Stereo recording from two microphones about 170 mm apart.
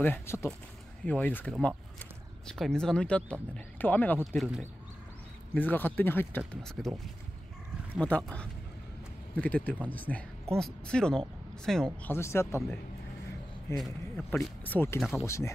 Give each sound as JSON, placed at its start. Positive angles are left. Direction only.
{"t": 0.0, "sound": "speech", "side_deg": 15}
{"t": 5.5, "sound": "speech", "side_deg": 10}
{"t": 7.9, "sound": "speech", "side_deg": 5}
{"t": 13.7, "sound": "speech", "side_deg": 0}